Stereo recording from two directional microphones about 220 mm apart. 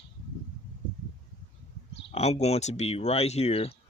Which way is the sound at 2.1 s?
30° left (ahead or behind).